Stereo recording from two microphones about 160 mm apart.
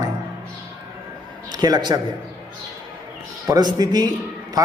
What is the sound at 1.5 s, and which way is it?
Speech, 25° right (ahead or behind).